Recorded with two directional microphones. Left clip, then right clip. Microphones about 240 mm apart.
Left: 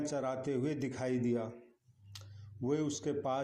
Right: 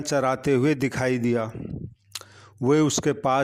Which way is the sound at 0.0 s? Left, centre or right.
Right.